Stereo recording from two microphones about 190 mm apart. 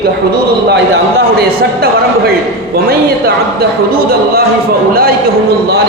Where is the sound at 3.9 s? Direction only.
50° right (ahead or behind).